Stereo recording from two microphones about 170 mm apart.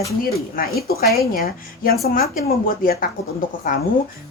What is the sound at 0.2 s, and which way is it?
Speech, 60° left (ahead or behind).